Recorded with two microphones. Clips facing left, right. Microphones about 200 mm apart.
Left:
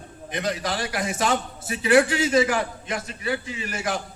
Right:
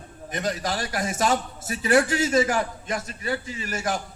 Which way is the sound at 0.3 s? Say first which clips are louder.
Left 1 dB; 45° right (ahead or behind).